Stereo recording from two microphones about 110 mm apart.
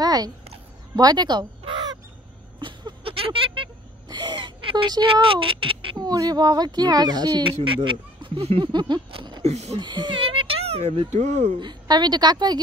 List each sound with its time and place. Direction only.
0.0 s a sound: 35° right (ahead or behind)
0.9 s speech: 40° right (ahead or behind)
1.6 s crow: 45° right (ahead or behind)
2.6 s a sound: 50° right (ahead or behind)
4.1 s a sound: 40° right (ahead or behind)
5.0 s speech: 55° right (ahead or behind)
5.9 s speech: 35° right (ahead or behind); by 8.6 s 55° right (ahead or behind)
8.7 s a sound: 40° right (ahead or behind)
9.4 s speech: 80° right
9.8 s speech: 40° right (ahead or behind); by 11.0 s 75° right (ahead or behind)
11.1 s speech: 90° right
11.6 s speech: 40° right (ahead or behind)